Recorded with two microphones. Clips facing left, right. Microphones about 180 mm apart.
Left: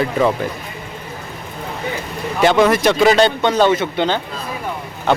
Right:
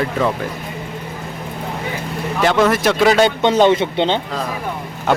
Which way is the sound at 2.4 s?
Centre (ahead or behind).